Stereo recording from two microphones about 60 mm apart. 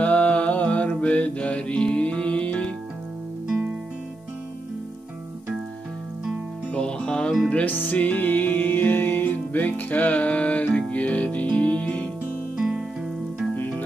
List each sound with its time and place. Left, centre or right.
0.0 s mantra: left
6.7 s music: centre
7.6 s music: left
12.5 s music: centre